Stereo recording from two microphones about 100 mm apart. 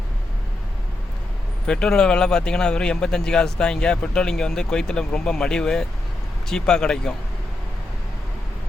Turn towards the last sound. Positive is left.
turn(degrees=5)  # may be behind; listen again after turning